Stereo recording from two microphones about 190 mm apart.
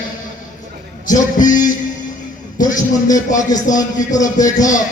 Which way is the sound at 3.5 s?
20° left (ahead or behind).